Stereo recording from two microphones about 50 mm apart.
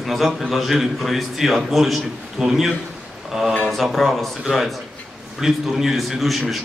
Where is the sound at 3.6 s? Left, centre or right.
Centre.